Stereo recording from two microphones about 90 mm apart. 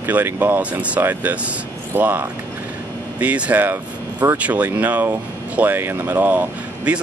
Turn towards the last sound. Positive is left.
turn(degrees=-15)  # may be behind; listen again after turning